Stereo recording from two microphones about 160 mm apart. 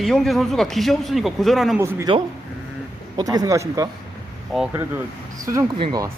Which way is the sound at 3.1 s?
25° right (ahead or behind).